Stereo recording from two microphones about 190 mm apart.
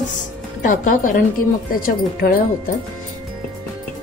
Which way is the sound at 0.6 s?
45° left (ahead or behind).